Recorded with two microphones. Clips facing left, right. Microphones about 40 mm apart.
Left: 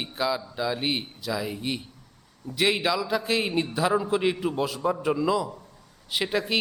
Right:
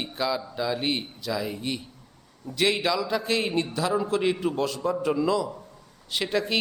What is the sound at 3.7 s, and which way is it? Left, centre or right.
A man's voice, centre.